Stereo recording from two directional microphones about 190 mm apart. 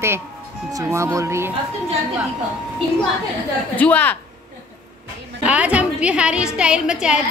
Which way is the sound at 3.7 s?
10° left (ahead or behind).